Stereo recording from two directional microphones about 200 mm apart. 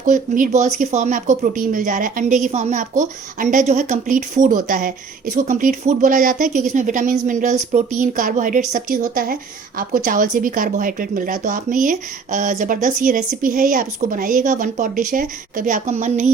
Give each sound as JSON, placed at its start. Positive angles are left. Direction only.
{"t": 0.0, "sound": "speech", "side_deg": -40}